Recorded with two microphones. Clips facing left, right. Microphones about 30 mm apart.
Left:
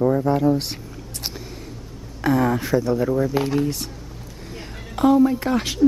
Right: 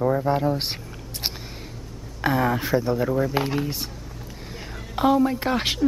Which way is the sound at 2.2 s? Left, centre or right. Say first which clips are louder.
Left 2 dB; centre.